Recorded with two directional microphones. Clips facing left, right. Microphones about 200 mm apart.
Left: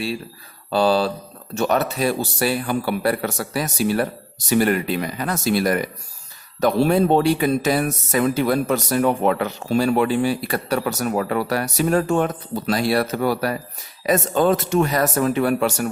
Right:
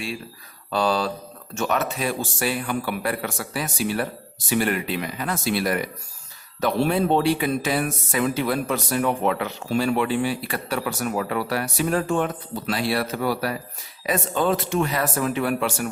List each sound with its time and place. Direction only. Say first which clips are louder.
0.7 s speech: left 5 dB; 30° left (ahead or behind)